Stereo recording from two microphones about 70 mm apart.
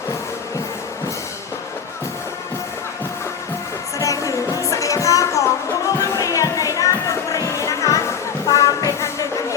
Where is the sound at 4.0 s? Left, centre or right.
Left.